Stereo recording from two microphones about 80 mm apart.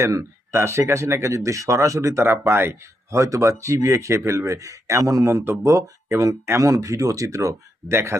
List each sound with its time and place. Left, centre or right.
0.0 s speech: right